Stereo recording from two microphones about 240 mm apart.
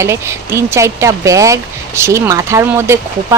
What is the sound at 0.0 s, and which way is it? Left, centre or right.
Speech, centre.